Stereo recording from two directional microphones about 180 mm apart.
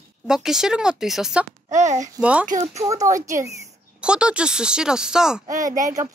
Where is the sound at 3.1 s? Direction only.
45° right (ahead or behind).